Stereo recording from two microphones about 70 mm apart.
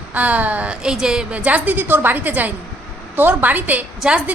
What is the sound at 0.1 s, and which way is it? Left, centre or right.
A woman's voice, right.